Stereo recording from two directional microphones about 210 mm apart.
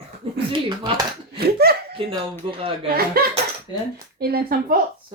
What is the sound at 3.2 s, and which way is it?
Speech, 45° right (ahead or behind).